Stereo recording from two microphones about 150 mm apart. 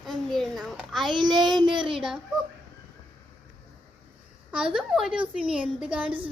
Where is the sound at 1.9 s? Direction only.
5° right (ahead or behind).